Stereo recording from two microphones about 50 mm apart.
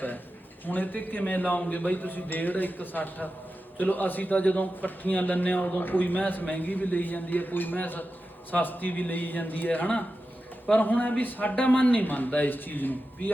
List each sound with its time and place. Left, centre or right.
0.6 s a man's voice: left